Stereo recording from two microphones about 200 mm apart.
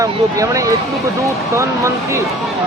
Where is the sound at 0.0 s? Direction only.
15° right (ahead or behind).